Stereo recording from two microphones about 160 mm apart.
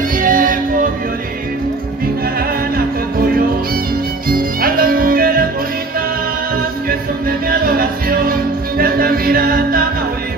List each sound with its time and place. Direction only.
0.2 s music: 60° right (ahead or behind)
4.3 s music: 65° right (ahead or behind)
6.9 s music: 65° right (ahead or behind)